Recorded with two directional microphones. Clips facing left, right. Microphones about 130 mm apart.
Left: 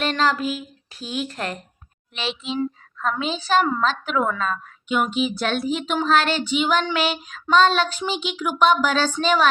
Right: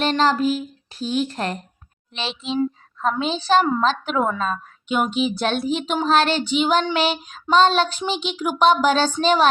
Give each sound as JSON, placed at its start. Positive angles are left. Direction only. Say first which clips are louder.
{"t": 0.0, "sound": "speech", "louder": "right 3 dB", "side_deg": -30}
{"t": 3.0, "sound": "a woman's voice", "louder": "right 2 dB", "side_deg": -25}